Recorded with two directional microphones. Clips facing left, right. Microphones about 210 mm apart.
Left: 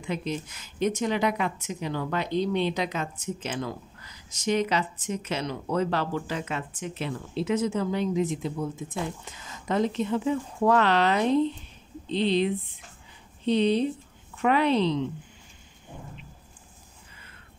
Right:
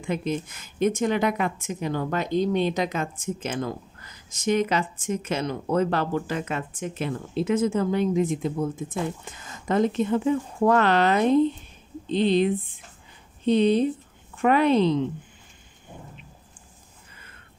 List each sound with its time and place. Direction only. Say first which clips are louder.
0.0 s a woman's voice: right 4 dB; 50° right (ahead or behind)